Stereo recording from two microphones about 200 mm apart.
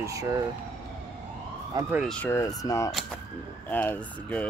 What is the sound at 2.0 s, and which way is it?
Speech, 5° left (ahead or behind).